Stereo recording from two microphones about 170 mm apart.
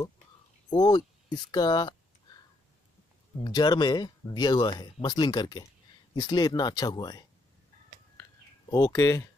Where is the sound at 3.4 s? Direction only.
25° left (ahead or behind).